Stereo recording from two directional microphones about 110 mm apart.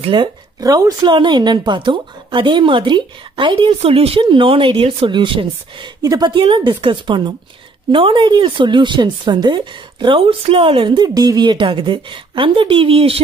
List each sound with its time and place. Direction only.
0.0 s speech: 50° right (ahead or behind)
0.6 s speech: 35° right (ahead or behind)
1.1 s a woman's voice: 45° right (ahead or behind); by 4.2 s 60° right (ahead or behind)
4.2 s a woman's voice: 50° right (ahead or behind)
11.0 s a woman's voice: 40° right (ahead or behind); by 13.2 s 60° right (ahead or behind)